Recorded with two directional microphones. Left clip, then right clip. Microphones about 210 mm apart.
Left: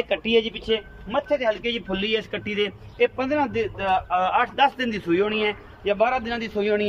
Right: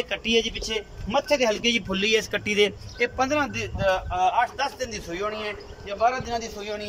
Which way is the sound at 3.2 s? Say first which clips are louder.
Left 1 dB; 25° left (ahead or behind).